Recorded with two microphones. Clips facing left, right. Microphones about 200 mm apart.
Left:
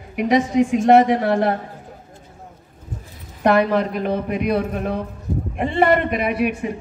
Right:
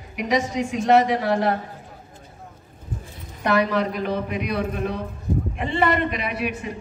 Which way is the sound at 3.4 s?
55° left (ahead or behind).